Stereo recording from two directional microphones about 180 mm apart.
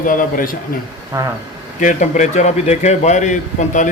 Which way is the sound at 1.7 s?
45° left (ahead or behind).